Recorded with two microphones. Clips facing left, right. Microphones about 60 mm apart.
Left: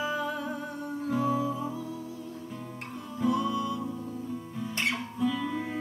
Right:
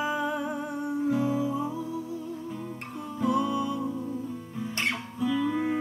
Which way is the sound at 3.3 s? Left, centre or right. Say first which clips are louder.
Right 2 dB; centre.